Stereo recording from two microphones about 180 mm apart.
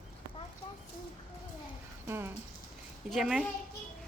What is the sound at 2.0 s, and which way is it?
Speech, 15° right (ahead or behind).